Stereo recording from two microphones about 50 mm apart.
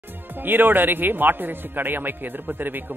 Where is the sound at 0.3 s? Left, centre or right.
Right.